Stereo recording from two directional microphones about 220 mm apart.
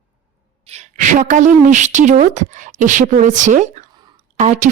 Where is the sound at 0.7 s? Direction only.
30° right (ahead or behind).